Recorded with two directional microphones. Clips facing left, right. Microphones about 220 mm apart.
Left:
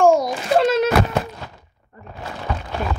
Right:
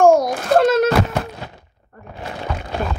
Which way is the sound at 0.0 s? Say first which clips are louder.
Right 2 dB; 45° right (ahead or behind).